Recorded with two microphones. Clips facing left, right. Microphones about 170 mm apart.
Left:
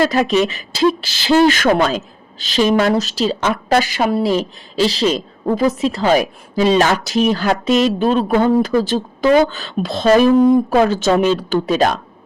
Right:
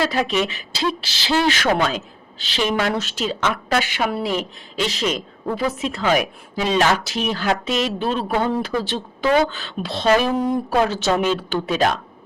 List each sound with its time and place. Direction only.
0.0 s a woman's voice: 45° left (ahead or behind)